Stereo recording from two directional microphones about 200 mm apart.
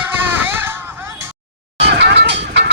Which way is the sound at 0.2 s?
10° right (ahead or behind).